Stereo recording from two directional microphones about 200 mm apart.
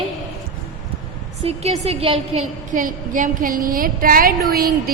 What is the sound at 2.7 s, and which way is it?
A woman's voice, 40° right (ahead or behind).